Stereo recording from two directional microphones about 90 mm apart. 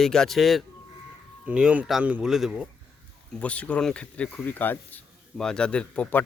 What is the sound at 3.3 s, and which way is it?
Speech, 15° left (ahead or behind).